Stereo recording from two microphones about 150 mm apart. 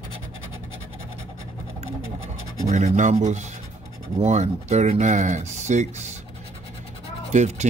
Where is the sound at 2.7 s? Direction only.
50° right (ahead or behind).